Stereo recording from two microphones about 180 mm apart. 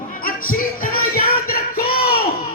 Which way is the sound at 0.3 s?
55° left (ahead or behind).